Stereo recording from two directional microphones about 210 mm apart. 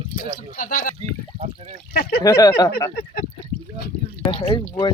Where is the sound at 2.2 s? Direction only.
15° left (ahead or behind).